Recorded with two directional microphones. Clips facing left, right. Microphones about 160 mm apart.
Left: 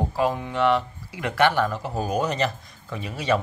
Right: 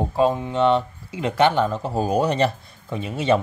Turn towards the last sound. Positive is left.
turn(degrees=-25)  # may be behind; listen again after turning